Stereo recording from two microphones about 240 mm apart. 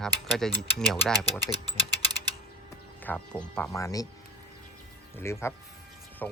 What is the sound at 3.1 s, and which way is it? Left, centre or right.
Speech, centre.